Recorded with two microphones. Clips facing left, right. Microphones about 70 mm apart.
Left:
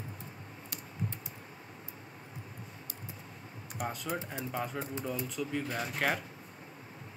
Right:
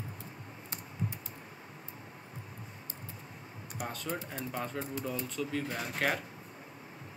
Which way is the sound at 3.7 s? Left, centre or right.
Centre.